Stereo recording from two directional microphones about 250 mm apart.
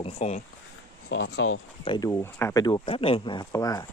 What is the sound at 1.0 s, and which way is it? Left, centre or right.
Speech, left.